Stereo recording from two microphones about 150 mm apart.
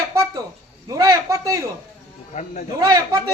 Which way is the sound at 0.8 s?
25° right (ahead or behind).